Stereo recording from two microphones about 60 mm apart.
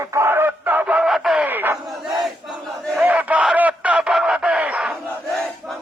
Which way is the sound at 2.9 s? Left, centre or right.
Right.